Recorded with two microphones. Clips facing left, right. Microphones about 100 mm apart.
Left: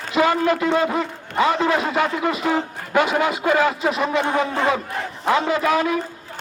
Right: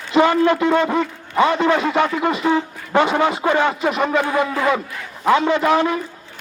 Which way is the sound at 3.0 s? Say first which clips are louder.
Right 2 dB; 35° right (ahead or behind).